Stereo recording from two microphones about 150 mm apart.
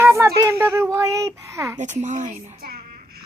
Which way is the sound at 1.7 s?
55° right (ahead or behind).